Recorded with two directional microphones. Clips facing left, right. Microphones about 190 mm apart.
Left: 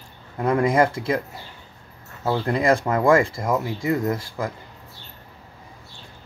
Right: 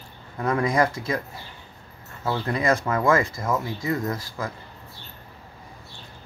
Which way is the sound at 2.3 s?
30° left (ahead or behind).